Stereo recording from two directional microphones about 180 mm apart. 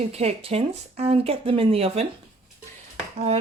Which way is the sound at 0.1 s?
35° right (ahead or behind).